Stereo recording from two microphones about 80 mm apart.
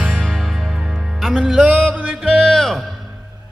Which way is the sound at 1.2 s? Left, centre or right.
Centre.